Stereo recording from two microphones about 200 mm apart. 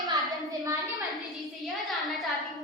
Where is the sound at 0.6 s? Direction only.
20° right (ahead or behind).